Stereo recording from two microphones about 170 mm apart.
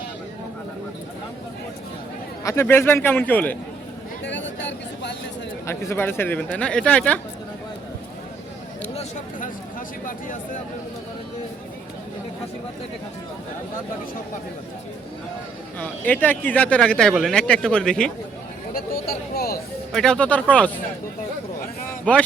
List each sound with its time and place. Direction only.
2.4 s speech: 15° left (ahead or behind)
4.2 s a sound: 90° left
5.6 s speech: 15° left (ahead or behind)
10.1 s speech: 50° left (ahead or behind)
15.8 s speech: 10° left (ahead or behind)
18.7 s a sound: 60° left (ahead or behind)
19.9 s speech: 5° left (ahead or behind)
22.1 s speech: 10° left (ahead or behind)